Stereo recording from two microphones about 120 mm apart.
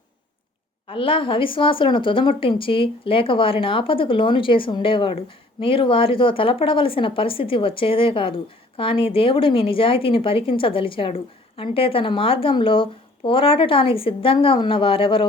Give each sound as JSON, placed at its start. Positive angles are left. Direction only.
{"t": 0.9, "sound": "a woman's voice", "side_deg": 45}